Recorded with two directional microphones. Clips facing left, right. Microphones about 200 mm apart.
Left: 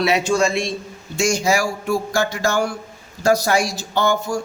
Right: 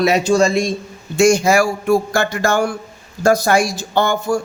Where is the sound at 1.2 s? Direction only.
55° right (ahead or behind).